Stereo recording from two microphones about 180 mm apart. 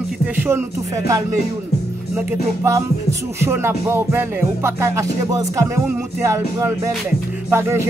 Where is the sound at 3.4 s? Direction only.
15° right (ahead or behind).